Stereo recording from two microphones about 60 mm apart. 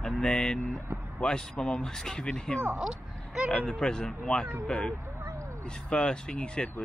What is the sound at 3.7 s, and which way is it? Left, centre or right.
Speech, centre.